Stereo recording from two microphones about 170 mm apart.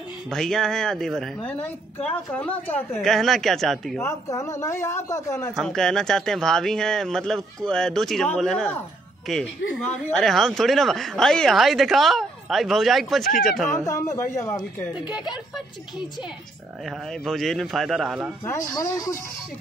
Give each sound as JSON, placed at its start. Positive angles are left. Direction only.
{"t": 0.3, "sound": "a woman's voice", "side_deg": 5}
{"t": 4.0, "sound": "a man's voice", "side_deg": 15}
{"t": 5.5, "sound": "a woman's voice", "side_deg": 5}
{"t": 13.7, "sound": "a man's voice", "side_deg": 15}
{"t": 16.8, "sound": "a woman's voice", "side_deg": 0}
{"t": 18.4, "sound": "speech", "side_deg": 20}